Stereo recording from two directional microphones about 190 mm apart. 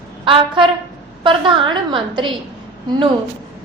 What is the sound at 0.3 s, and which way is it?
A woman's voice, 25° right (ahead or behind).